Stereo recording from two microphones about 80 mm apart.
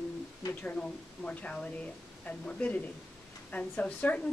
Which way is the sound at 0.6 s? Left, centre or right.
Centre.